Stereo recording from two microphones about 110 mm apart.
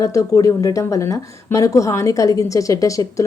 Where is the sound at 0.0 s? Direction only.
30° left (ahead or behind).